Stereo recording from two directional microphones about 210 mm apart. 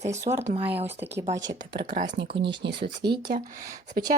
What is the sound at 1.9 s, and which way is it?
Speech, 40° right (ahead or behind).